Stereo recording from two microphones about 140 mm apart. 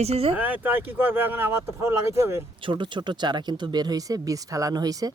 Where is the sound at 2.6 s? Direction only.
35° right (ahead or behind).